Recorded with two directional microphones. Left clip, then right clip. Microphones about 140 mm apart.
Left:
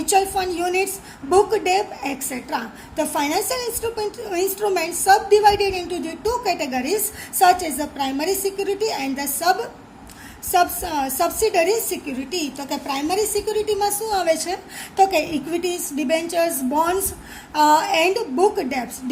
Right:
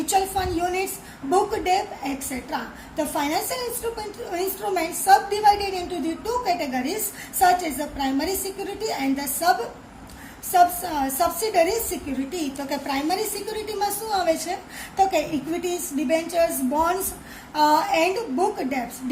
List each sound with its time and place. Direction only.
0.0 s a woman's voice: 45° left (ahead or behind)